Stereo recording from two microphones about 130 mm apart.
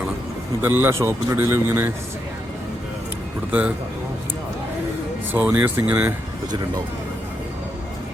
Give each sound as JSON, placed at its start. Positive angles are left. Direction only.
{"t": 0.6, "sound": "speech", "side_deg": -15}
{"t": 5.3, "sound": "speech", "side_deg": -15}